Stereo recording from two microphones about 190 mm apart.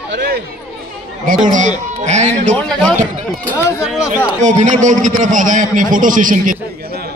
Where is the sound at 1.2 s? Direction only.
45° right (ahead or behind).